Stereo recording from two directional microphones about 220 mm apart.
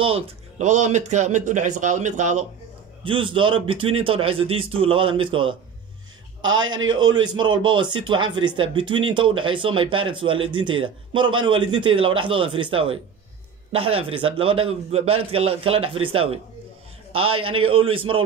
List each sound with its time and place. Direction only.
0.0 s speech: 30° right (ahead or behind)
3.0 s a man's voice: 25° right (ahead or behind)
6.4 s a man's voice: 60° right (ahead or behind)
6.9 s a man's voice: 20° right (ahead or behind)
17.4 s a man's voice: 25° right (ahead or behind)